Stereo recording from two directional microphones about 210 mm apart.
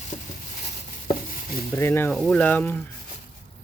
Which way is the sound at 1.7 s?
10° left (ahead or behind).